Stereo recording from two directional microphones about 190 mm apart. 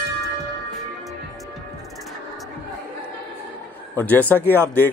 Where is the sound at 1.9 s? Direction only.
Centre (ahead or behind).